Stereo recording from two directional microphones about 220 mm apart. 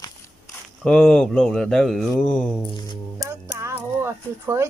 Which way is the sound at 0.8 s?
Centre (ahead or behind).